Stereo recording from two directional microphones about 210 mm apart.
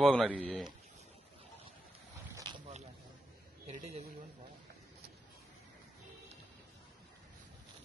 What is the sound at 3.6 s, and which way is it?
Speech, 30° right (ahead or behind).